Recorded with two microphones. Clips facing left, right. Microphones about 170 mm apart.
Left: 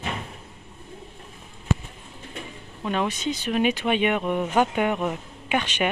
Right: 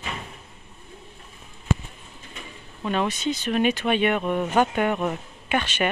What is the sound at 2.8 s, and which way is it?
Speech, 10° left (ahead or behind).